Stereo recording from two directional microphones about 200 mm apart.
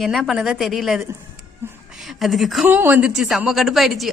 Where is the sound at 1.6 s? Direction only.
10° right (ahead or behind).